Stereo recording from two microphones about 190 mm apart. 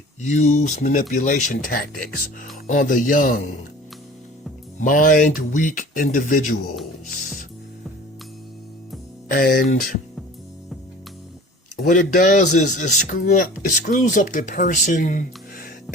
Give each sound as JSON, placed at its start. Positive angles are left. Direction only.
{"t": 0.2, "sound": "a man's voice", "side_deg": 40}
{"t": 4.8, "sound": "a man's voice", "side_deg": 45}
{"t": 9.3, "sound": "a man's voice", "side_deg": 50}
{"t": 11.8, "sound": "a man's voice", "side_deg": 45}